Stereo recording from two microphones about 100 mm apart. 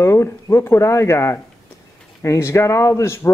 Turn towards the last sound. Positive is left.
turn(degrees=30)  # may be behind; listen again after turning